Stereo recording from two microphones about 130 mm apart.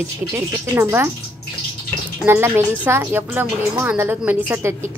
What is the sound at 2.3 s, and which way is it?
A woman's voice, 20° right (ahead or behind).